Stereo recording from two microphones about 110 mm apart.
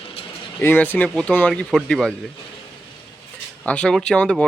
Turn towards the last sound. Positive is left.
turn(degrees=10)  # may be behind; listen again after turning